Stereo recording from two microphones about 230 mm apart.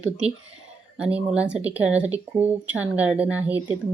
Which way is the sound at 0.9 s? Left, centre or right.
Centre.